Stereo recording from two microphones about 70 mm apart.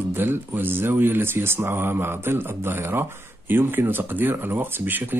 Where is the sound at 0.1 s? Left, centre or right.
Right.